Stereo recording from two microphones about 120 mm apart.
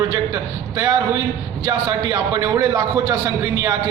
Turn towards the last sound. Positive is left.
turn(degrees=-30)  # may be behind; listen again after turning